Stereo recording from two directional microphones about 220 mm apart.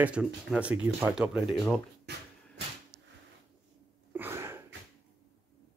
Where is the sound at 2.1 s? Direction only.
50° right (ahead or behind).